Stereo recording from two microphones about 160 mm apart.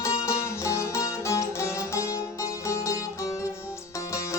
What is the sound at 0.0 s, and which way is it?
Music, 15° left (ahead or behind).